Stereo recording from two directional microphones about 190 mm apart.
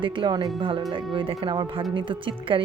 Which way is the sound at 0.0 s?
25° right (ahead or behind).